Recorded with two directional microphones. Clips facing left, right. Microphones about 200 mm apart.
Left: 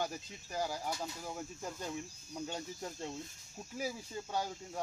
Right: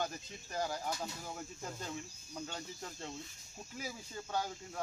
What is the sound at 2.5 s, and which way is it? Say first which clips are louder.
Speech: left 4 dB; 15° left (ahead or behind).